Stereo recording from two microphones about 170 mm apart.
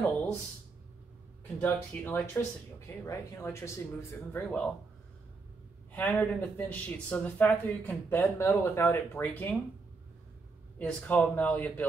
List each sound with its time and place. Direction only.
1.6 s speech: 10° left (ahead or behind)
5.9 s speech: 10° left (ahead or behind)
10.8 s speech: 5° left (ahead or behind)